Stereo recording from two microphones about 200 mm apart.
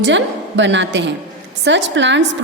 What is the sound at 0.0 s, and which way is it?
A woman's voice, 65° right (ahead or behind).